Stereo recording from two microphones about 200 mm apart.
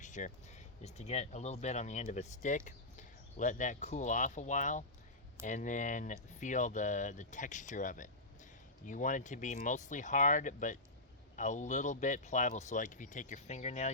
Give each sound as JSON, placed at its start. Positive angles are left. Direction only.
{"t": 0.0, "sound": "speech", "side_deg": 35}